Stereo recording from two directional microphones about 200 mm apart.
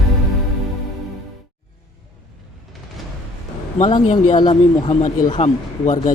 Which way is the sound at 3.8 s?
35° left (ahead or behind).